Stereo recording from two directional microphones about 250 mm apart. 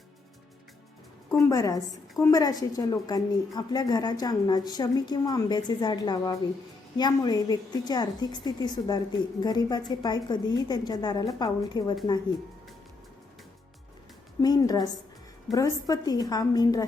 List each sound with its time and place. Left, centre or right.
1.5 s a woman's voice: centre
14.4 s a woman's voice: centre